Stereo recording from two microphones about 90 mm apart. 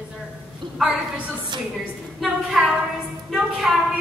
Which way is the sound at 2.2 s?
5° right (ahead or behind).